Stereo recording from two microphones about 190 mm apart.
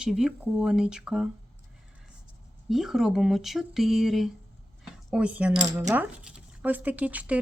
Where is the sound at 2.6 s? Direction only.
Centre (ahead or behind).